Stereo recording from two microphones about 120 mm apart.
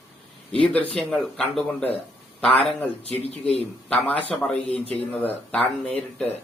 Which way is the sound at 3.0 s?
60° right (ahead or behind).